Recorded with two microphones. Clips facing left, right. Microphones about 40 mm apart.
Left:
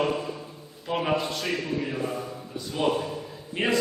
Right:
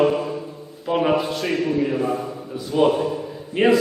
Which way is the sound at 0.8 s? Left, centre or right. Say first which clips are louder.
Right 8 dB; centre.